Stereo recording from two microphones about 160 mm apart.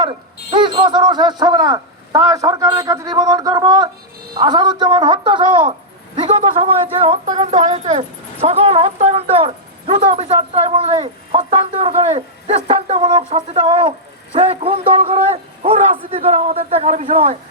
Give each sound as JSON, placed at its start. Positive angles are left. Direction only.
{"t": 0.5, "sound": "a man's voice", "side_deg": -30}